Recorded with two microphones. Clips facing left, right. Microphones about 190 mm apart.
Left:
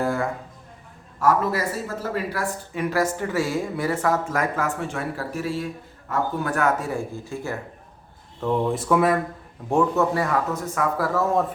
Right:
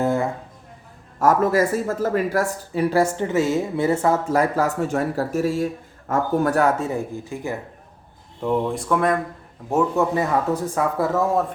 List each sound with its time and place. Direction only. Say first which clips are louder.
0.0 s a sound: right 3 dB; 25° right (ahead or behind)
1.2 s speech: right 4 dB; 45° right (ahead or behind)
6.7 s speech: right 3 dB; 20° right (ahead or behind)
8.7 s speech: left 1 dB; 5° left (ahead or behind)
9.6 s speech: even; 10° right (ahead or behind)